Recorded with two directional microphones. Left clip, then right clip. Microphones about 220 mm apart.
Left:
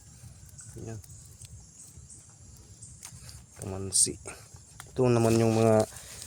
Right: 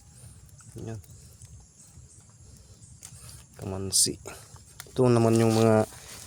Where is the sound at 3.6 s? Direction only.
20° right (ahead or behind).